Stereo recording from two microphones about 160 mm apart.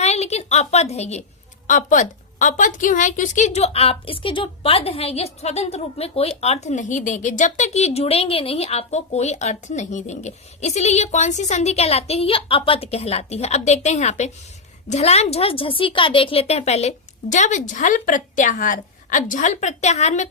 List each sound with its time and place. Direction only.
0.0 s a woman's voice: 45° left (ahead or behind)